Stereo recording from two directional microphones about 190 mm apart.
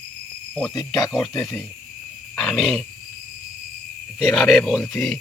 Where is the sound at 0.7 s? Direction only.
20° left (ahead or behind).